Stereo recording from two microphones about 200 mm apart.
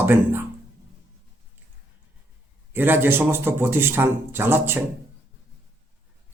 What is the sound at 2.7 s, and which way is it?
A man's voice, 10° right (ahead or behind).